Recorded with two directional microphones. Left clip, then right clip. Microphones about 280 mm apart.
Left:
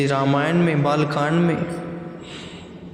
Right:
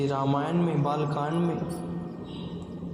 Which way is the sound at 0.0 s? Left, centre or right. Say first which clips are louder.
Left 7 dB; left.